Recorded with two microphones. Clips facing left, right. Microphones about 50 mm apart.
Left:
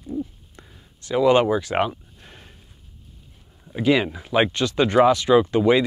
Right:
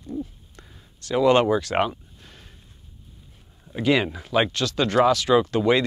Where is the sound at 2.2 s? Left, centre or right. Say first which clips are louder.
Left 2 dB; left.